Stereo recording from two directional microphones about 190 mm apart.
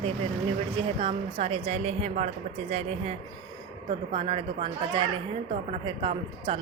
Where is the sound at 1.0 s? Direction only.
30° right (ahead or behind).